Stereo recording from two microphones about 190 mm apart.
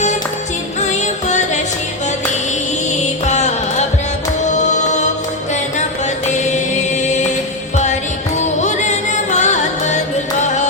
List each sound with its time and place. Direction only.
0.8 s music: 40° left (ahead or behind)
2.9 s music: 40° left (ahead or behind)
6.2 s chant: 40° left (ahead or behind)
8.4 s music: 40° left (ahead or behind)